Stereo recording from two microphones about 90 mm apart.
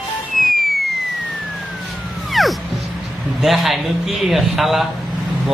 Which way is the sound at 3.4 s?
Centre (ahead or behind).